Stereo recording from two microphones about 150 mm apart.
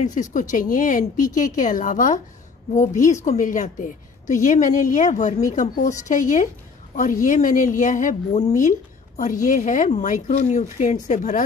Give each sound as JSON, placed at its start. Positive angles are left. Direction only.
{"t": 0.0, "sound": "speech", "side_deg": 55}
{"t": 3.0, "sound": "a woman's voice", "side_deg": 20}
{"t": 3.3, "sound": "speech", "side_deg": 55}